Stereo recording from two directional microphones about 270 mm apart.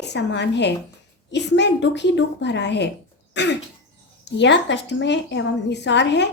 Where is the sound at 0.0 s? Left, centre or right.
Left.